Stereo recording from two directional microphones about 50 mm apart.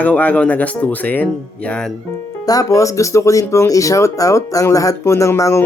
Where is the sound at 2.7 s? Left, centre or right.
Left.